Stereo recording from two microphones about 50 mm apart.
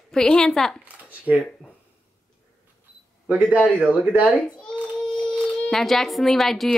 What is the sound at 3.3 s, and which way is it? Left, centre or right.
Speech, right.